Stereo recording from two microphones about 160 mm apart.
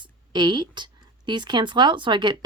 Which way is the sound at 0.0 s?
30° right (ahead or behind).